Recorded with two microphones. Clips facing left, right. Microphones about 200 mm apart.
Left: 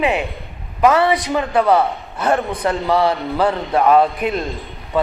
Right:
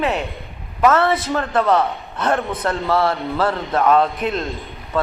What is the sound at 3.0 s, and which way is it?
A man's voice, 15° left (ahead or behind).